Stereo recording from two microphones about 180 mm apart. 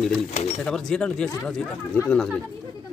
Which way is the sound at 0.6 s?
5° left (ahead or behind).